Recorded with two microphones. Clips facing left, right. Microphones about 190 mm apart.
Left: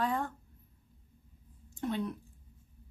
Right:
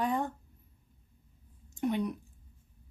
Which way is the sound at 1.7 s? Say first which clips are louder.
Right 3 dB; 15° right (ahead or behind).